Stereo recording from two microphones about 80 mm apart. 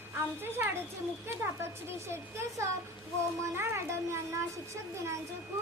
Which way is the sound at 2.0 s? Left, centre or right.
Right.